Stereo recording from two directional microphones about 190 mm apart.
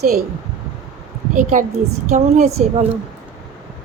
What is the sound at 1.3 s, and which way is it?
A woman's voice, 45° right (ahead or behind).